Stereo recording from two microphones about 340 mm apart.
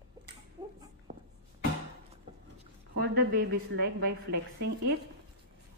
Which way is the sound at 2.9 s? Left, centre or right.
Right.